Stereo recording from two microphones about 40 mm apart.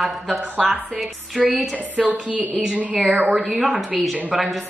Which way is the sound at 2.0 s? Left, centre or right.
Right.